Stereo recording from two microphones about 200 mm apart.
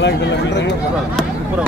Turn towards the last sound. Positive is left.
turn(degrees=60)  # may be behind; listen again after turning